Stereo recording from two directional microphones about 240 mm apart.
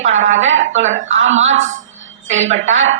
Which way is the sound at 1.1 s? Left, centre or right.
Right.